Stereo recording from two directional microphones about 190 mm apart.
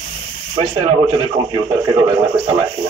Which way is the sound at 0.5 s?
25° right (ahead or behind).